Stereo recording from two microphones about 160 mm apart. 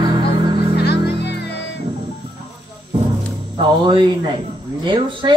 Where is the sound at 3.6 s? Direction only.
30° right (ahead or behind).